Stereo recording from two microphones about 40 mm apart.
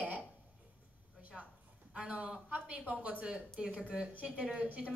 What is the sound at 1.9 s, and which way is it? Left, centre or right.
Speech, right.